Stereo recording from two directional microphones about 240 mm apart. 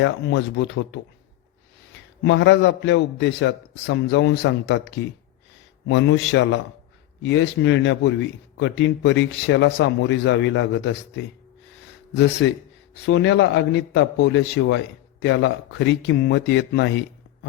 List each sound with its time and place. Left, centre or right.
0.0 s speech: left
2.2 s speech: left